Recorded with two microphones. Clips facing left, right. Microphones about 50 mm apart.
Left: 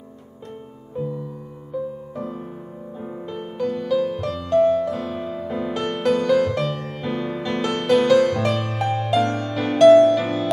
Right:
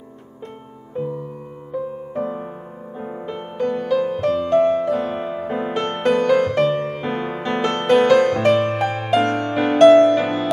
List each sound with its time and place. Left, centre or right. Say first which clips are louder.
2.1 s music: right 5 dB; right